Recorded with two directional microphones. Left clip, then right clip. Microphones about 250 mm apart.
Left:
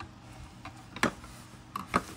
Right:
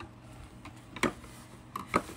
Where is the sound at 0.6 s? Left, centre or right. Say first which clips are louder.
Left 2 dB; centre.